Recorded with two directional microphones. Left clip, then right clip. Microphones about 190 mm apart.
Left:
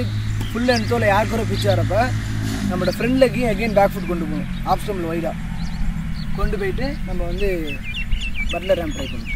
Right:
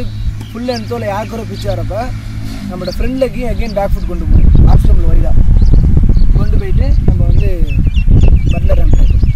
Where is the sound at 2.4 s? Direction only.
25° right (ahead or behind).